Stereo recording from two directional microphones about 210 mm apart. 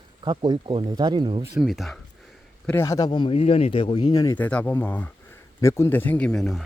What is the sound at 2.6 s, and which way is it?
Speech, 10° left (ahead or behind).